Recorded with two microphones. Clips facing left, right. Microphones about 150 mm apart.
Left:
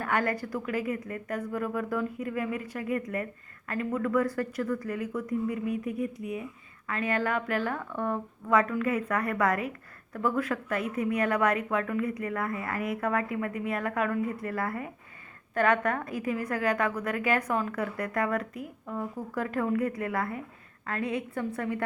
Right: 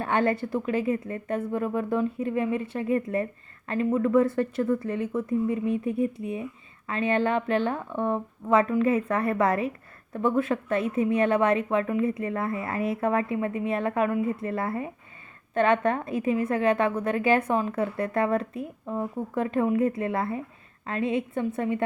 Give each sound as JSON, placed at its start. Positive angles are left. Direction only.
{"t": 0.0, "sound": "speech", "side_deg": -25}